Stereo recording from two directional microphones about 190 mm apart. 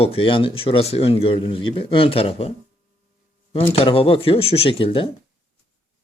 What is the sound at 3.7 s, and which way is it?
Speech, 30° left (ahead or behind).